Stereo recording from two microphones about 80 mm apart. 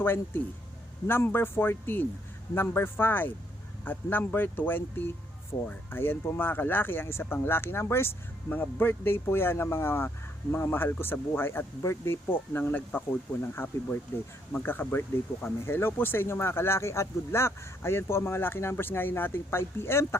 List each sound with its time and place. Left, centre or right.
0.0 s speech: left